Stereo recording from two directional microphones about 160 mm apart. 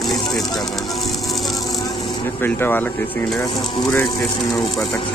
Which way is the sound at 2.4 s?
15° left (ahead or behind).